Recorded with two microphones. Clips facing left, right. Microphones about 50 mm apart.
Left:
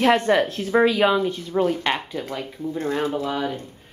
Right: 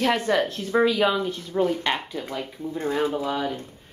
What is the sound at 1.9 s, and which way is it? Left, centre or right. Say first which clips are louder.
Speech: left 2 dB; centre.